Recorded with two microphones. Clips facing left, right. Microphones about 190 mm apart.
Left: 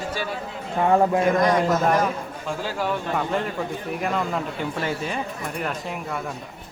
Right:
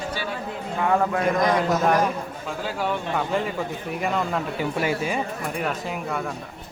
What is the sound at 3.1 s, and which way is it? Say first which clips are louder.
Music: even; centre (ahead or behind).